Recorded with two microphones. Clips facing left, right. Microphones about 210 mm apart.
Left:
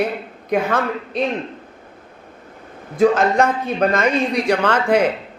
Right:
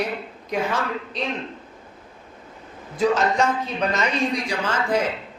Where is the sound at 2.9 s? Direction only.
55° left (ahead or behind).